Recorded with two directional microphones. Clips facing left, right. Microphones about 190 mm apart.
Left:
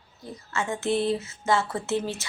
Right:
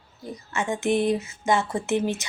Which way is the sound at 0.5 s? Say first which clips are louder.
Right 2 dB; 15° right (ahead or behind).